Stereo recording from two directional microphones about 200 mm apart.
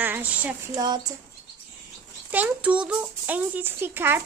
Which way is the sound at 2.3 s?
5° right (ahead or behind).